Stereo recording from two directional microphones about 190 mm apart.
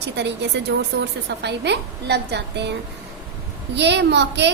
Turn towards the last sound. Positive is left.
turn(degrees=-65)  # may be behind; listen again after turning